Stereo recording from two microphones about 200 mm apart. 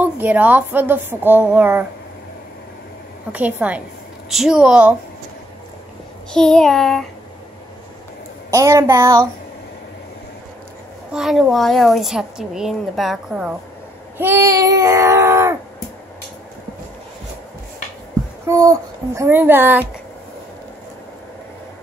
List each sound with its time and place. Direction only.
0.0 s a woman's voice: 10° right (ahead or behind)
3.3 s a woman's voice: 10° right (ahead or behind)
6.3 s a woman's voice: 5° left (ahead or behind)
8.5 s a woman's voice: 15° right (ahead or behind)
11.1 s a woman's voice: centre (ahead or behind)
14.1 s child singing: 10° right (ahead or behind)
18.5 s a woman's voice: 15° right (ahead or behind)